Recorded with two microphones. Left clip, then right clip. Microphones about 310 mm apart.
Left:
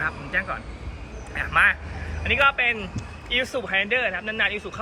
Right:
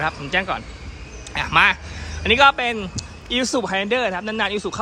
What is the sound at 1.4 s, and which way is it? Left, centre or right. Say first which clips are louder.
A man's voice: right 3 dB; centre.